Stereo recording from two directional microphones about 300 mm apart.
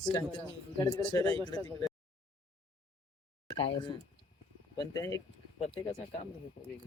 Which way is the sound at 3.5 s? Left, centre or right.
Centre.